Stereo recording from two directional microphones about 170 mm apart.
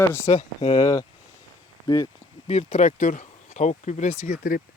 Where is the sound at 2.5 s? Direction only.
40° left (ahead or behind).